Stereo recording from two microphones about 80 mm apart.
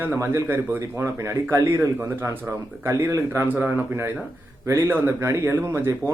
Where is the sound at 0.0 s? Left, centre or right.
Right.